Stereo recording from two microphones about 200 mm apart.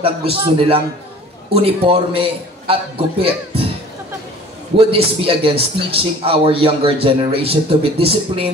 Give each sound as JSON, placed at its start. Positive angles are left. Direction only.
{"t": 0.0, "sound": "a man's voice", "side_deg": -25}
{"t": 4.7, "sound": "a man's voice", "side_deg": -30}